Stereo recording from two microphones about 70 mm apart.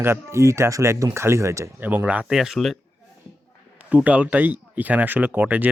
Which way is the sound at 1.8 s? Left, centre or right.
Right.